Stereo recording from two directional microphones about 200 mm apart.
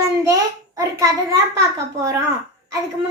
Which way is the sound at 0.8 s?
15° right (ahead or behind).